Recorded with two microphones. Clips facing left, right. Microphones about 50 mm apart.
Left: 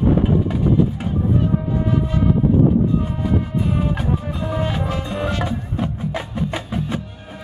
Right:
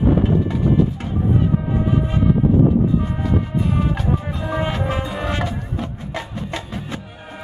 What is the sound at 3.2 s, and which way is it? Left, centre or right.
Music, centre.